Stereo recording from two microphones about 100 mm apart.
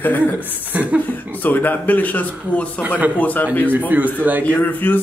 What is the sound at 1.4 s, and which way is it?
A man's voice, 20° left (ahead or behind).